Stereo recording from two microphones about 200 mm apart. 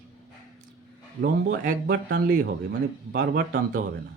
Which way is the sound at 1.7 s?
50° right (ahead or behind).